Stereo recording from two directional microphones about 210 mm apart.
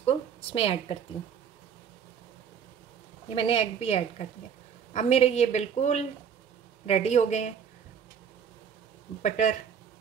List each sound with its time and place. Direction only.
0.0 s a sound: 25° left (ahead or behind)
3.3 s a woman's voice: 25° left (ahead or behind)
9.2 s a woman's voice: 35° left (ahead or behind)